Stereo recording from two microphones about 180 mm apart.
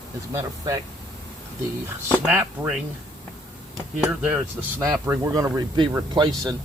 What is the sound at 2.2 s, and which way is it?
Speech, 10° right (ahead or behind).